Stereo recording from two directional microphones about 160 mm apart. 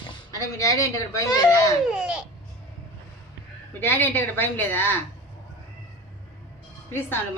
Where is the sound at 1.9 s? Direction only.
5° right (ahead or behind).